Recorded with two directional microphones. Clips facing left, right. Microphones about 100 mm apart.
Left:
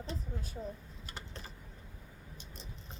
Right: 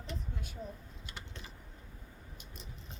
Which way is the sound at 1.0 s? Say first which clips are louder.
Left 2 dB; 40° left (ahead or behind).